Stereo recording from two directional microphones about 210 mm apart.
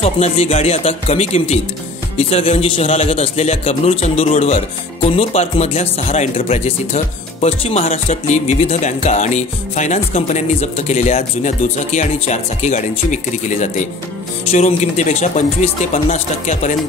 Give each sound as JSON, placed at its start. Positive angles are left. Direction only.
{"t": 0.0, "sound": "a man's voice", "side_deg": 30}